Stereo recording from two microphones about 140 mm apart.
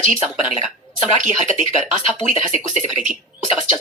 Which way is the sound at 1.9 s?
40° left (ahead or behind).